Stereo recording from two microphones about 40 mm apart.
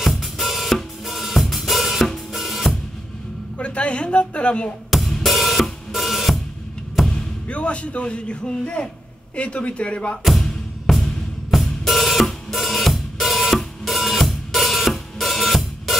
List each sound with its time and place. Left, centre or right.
0.0 s drum kit: centre
3.5 s a woman's voice: left
4.9 s drum kit: centre
7.0 s a sound: centre
7.4 s a man's voice: left
10.2 s music: centre
11.5 s drum kit: centre